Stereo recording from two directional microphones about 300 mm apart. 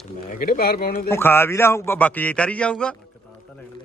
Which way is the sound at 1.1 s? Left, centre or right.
Centre.